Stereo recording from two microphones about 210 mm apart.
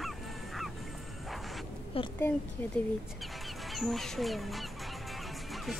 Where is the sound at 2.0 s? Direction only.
25° left (ahead or behind).